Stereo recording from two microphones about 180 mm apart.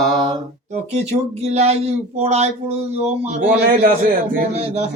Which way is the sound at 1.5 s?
35° right (ahead or behind).